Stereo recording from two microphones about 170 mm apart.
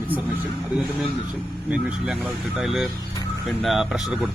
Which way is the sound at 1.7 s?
5° right (ahead or behind).